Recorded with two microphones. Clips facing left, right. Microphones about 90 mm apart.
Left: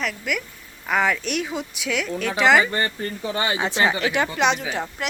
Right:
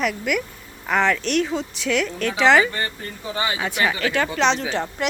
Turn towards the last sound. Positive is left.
turn(degrees=5)  # may be behind; listen again after turning